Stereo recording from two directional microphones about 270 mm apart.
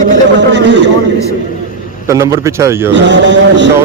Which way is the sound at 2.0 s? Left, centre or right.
Centre.